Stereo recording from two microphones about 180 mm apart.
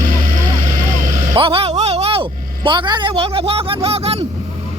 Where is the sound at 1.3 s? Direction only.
30° right (ahead or behind).